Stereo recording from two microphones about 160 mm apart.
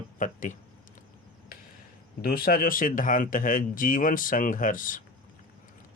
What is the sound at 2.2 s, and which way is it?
Speech, 65° left (ahead or behind).